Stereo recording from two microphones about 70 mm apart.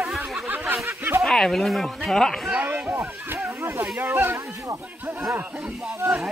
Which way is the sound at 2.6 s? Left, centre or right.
Right.